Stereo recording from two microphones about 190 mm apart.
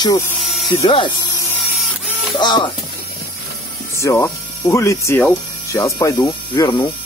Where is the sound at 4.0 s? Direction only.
15° left (ahead or behind).